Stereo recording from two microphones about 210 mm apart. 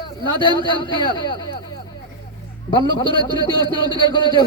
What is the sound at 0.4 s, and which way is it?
A man's voice, 20° left (ahead or behind).